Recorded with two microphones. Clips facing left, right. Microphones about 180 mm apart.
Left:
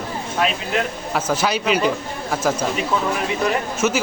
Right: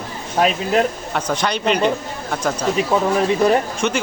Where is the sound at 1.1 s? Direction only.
5° left (ahead or behind).